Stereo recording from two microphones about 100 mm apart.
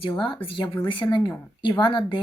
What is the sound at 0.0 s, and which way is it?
Speech, 55° left (ahead or behind).